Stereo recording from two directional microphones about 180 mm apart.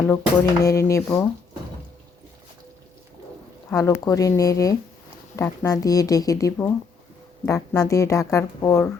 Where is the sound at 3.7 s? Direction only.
15° left (ahead or behind).